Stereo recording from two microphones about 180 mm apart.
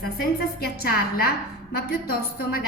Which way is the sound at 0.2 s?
60° left (ahead or behind).